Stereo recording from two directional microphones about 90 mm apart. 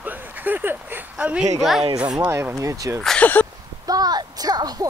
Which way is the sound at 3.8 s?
45° right (ahead or behind).